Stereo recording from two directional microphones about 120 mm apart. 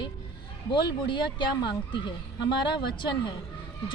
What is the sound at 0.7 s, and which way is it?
A woman's voice, 40° left (ahead or behind).